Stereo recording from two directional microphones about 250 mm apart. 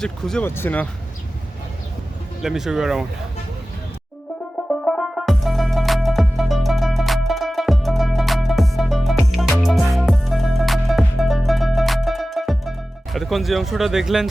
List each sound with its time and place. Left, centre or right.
0.0 s speech: centre
2.4 s speech: centre
4.7 s music: centre
13.1 s speech: centre